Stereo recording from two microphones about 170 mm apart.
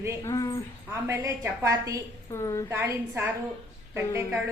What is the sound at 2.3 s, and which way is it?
Speech, 15° left (ahead or behind).